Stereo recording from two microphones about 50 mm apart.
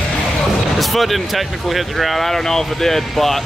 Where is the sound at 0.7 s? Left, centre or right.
Centre.